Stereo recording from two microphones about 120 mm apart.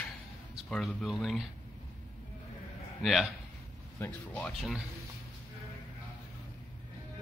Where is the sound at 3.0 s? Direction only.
Centre (ahead or behind).